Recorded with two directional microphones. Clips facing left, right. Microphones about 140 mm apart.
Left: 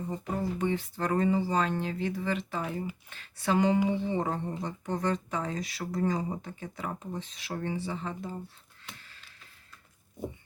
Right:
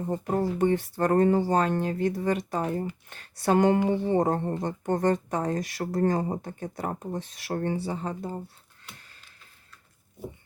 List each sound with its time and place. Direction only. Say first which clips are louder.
0.1 s speech: right 7 dB; 50° right (ahead or behind)